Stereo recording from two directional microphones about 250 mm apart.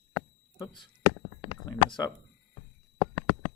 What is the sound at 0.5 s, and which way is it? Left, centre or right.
Speech, centre.